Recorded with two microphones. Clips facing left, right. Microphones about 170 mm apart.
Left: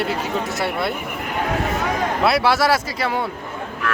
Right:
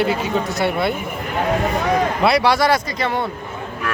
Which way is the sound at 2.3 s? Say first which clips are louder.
Right 1 dB; 5° left (ahead or behind).